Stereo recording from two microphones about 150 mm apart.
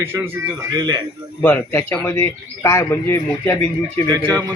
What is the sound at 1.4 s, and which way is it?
A man's voice, 15° left (ahead or behind).